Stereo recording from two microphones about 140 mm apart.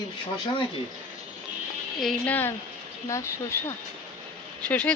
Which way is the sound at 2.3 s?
15° left (ahead or behind).